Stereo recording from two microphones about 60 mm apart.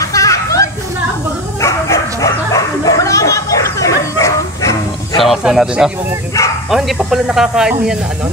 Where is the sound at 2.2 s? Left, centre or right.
Left.